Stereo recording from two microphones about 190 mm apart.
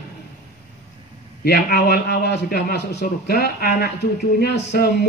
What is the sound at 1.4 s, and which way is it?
Speech, 55° left (ahead or behind).